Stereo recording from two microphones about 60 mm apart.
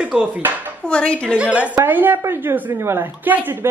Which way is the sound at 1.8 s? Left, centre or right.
Right.